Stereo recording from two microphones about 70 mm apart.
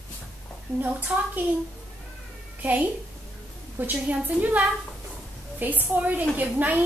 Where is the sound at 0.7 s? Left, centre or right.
Right.